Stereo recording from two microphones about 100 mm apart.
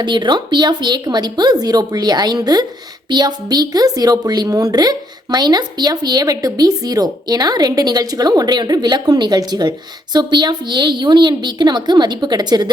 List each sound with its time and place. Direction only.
0.0 s speech: 50° right (ahead or behind)